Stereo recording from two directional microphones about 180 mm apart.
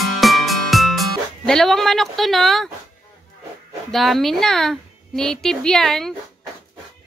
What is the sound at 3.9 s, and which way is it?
A woman's voice, centre (ahead or behind).